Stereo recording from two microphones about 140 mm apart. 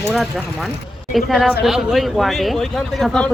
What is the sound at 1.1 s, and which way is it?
A man's voice, centre (ahead or behind).